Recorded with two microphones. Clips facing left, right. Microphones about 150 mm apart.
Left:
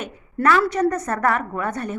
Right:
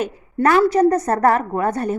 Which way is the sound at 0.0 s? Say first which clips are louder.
Right 3 dB; 35° right (ahead or behind).